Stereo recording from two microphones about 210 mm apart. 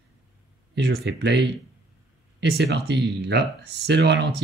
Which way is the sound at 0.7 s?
55° right (ahead or behind).